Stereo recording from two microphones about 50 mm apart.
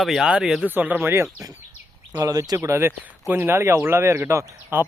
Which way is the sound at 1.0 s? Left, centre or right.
Right.